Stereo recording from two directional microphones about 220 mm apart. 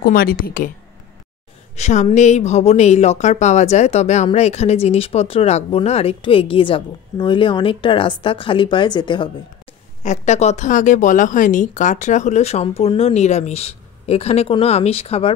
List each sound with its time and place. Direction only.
0.0 s a woman's voice: 40° left (ahead or behind)
1.8 s a woman's voice: 30° left (ahead or behind)
10.0 s a woman's voice: 30° left (ahead or behind)